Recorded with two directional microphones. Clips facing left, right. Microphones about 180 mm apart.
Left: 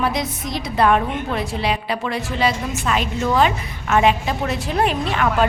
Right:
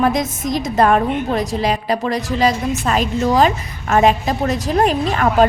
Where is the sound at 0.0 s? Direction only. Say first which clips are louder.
Right 5 dB; 45° right (ahead or behind).